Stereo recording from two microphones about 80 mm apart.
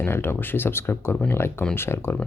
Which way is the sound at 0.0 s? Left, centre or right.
Left.